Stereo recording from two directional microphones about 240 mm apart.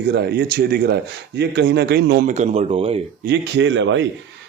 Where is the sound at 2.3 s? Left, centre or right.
Right.